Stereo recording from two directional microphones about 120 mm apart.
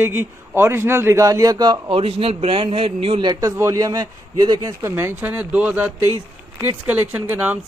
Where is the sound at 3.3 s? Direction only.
25° right (ahead or behind).